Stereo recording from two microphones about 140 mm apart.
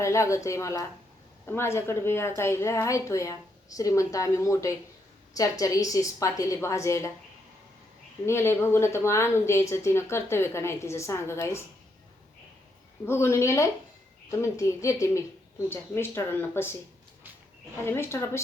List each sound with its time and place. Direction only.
0.0 s speech: 20° left (ahead or behind)
8.3 s speech: 15° left (ahead or behind)
13.1 s speech: 20° left (ahead or behind)
17.8 s speech: 20° left (ahead or behind)